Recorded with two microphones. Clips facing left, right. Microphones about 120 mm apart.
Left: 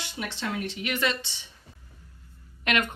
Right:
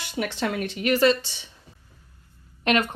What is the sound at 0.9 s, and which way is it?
Speech, 35° right (ahead or behind).